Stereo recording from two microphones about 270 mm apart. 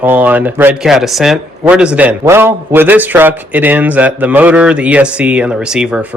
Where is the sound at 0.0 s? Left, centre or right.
Centre.